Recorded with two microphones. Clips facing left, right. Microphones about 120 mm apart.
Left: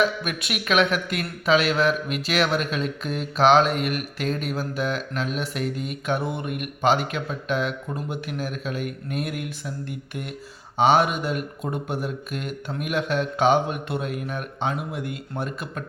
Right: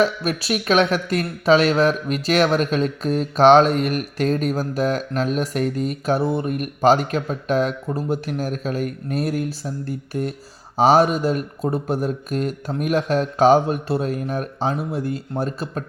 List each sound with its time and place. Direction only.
0.0 s speech: 35° right (ahead or behind)